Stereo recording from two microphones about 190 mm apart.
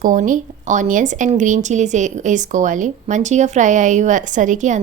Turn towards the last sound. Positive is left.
turn(degrees=-40)  # may be behind; listen again after turning